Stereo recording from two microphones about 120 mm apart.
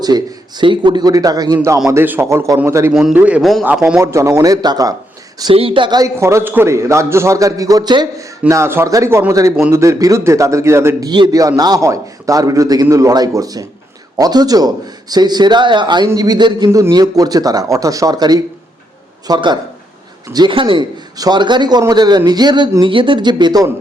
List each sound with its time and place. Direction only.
0.0 s a man's voice: 35° right (ahead or behind)
1.9 s a man's voice: 20° right (ahead or behind)
2.9 s speech: 5° right (ahead or behind)
4.0 s a man's voice: 25° right (ahead or behind)
5.5 s speech: 50° right (ahead or behind)
6.0 s a man's voice: 25° right (ahead or behind)
11.1 s a man's voice: 35° right (ahead or behind)
16.6 s a man's voice: 25° right (ahead or behind)